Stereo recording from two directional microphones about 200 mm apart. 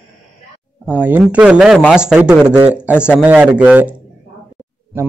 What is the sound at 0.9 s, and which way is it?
A man's voice, 10° right (ahead or behind).